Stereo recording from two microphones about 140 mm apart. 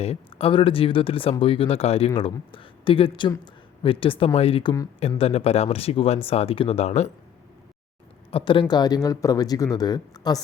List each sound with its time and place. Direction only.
0.0 s speech: 45° left (ahead or behind)
8.3 s a man's voice: 40° left (ahead or behind)